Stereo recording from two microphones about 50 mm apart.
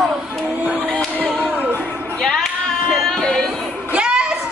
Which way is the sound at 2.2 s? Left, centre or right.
Centre.